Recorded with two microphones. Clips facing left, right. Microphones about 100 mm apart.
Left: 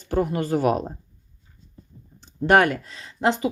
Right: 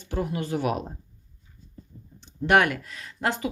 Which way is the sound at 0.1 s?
50° left (ahead or behind).